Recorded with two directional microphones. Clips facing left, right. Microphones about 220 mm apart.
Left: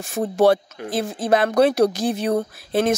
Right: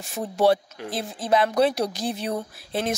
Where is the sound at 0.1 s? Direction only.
50° left (ahead or behind).